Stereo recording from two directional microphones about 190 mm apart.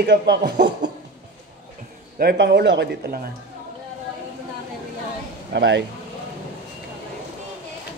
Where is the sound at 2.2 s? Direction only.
60° right (ahead or behind).